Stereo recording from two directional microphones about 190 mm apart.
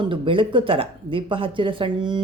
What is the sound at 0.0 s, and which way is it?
Speech, 25° right (ahead or behind).